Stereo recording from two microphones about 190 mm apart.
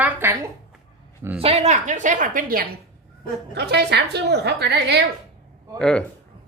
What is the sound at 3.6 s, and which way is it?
A woman's voice, 60° right (ahead or behind).